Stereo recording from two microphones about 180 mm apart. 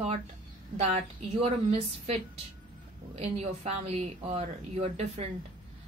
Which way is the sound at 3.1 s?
35° right (ahead or behind).